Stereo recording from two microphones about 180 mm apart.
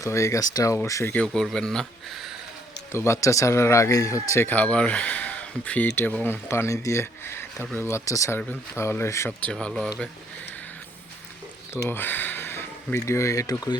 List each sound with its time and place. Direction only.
0.0 s speech: 15° left (ahead or behind); by 2.3 s centre (ahead or behind)
2.9 s speech: 15° left (ahead or behind)
11.7 s speech: 10° left (ahead or behind)